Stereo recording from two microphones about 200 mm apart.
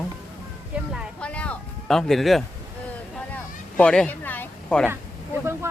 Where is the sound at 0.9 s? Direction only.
Centre (ahead or behind).